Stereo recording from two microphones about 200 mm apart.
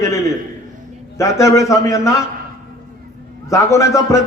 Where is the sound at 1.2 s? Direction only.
15° left (ahead or behind).